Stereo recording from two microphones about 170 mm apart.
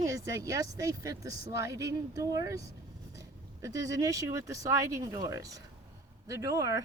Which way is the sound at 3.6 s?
20° right (ahead or behind).